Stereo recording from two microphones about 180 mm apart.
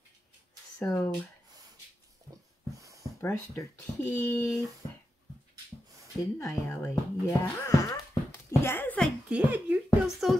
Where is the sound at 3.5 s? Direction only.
15° left (ahead or behind).